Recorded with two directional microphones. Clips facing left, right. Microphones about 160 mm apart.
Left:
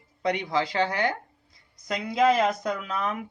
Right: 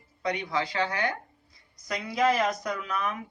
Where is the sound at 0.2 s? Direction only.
25° left (ahead or behind).